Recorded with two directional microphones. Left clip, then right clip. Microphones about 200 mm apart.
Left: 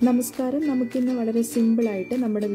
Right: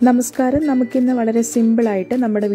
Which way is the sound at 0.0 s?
25° right (ahead or behind).